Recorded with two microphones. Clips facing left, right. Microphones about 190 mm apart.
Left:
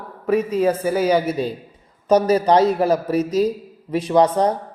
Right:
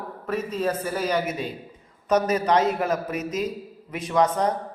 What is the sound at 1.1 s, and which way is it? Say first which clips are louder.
Speech: left 6 dB; 35° left (ahead or behind).